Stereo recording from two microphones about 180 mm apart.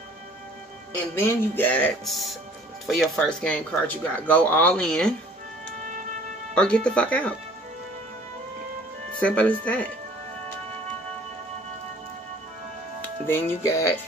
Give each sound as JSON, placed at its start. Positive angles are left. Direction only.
{"t": 1.2, "sound": "speech", "side_deg": 10}
{"t": 6.5, "sound": "speech", "side_deg": 5}
{"t": 9.2, "sound": "speech", "side_deg": 5}
{"t": 13.3, "sound": "speech", "side_deg": 15}